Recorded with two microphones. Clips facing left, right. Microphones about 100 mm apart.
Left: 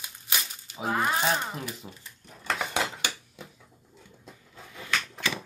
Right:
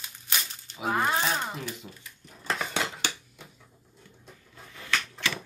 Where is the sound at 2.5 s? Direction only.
5° left (ahead or behind).